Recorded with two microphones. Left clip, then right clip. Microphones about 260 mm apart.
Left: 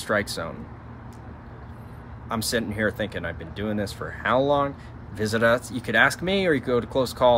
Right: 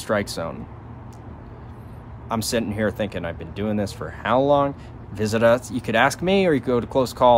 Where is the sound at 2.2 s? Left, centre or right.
Centre.